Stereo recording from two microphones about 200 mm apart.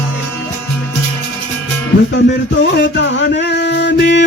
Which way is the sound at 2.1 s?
65° left (ahead or behind).